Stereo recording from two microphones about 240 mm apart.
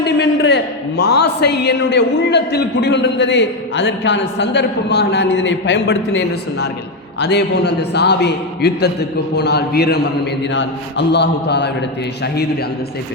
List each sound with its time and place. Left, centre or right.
0.0 s a man's voice: left